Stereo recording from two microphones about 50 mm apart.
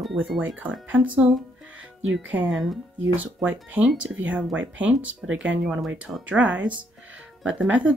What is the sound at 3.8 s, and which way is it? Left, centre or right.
Speech, centre.